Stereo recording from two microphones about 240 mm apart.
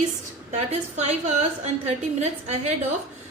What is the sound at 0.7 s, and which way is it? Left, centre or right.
A woman's voice, right.